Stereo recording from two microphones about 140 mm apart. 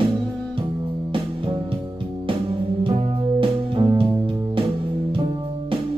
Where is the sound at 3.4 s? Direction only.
40° right (ahead or behind).